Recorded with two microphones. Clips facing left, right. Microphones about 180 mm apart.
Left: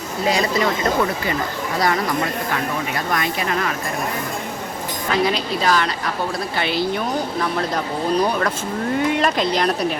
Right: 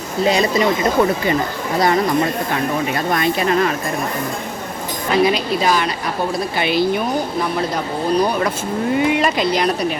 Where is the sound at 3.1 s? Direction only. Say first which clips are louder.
Right 6 dB; 30° right (ahead or behind).